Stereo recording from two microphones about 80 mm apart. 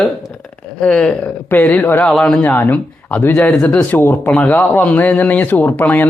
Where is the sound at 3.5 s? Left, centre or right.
Centre.